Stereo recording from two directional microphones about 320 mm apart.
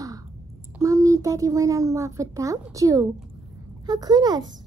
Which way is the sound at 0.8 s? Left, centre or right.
Centre.